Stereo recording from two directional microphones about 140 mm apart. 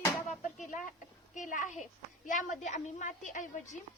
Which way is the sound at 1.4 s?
65° left (ahead or behind).